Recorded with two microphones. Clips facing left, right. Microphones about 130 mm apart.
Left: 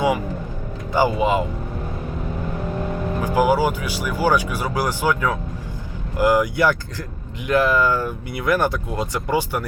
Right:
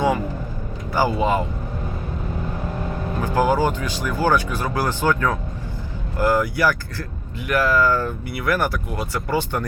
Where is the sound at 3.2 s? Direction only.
10° left (ahead or behind).